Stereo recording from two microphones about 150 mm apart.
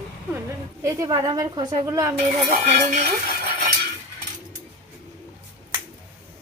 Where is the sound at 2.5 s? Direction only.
65° right (ahead or behind).